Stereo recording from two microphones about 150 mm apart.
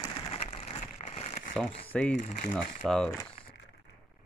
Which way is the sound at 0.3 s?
40° left (ahead or behind).